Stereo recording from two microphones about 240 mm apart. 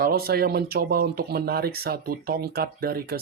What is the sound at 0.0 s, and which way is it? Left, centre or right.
Speech, right.